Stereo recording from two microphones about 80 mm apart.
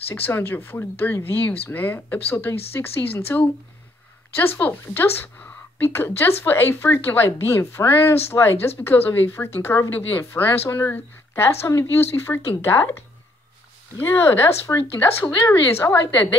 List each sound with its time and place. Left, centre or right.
0.1 s a woman's voice: left